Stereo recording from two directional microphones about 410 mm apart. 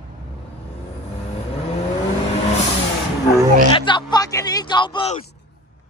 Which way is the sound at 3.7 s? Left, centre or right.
Centre.